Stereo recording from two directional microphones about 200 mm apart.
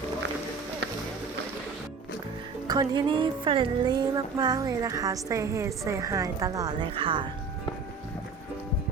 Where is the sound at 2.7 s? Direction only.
20° right (ahead or behind).